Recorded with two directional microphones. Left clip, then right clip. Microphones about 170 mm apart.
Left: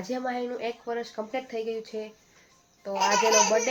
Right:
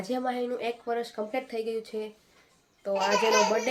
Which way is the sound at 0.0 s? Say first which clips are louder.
Right 1 dB; 10° right (ahead or behind).